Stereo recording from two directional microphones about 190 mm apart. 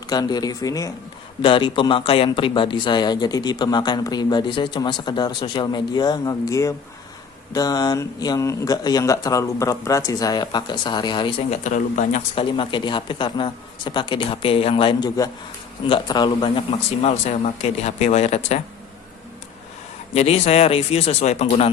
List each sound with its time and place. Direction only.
0.1 s speech: 20° left (ahead or behind)
20.1 s speech: 35° left (ahead or behind)